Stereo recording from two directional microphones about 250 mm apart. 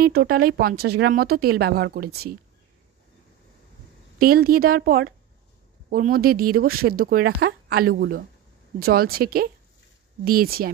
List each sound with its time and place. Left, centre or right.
0.0 s speech: right
4.2 s speech: right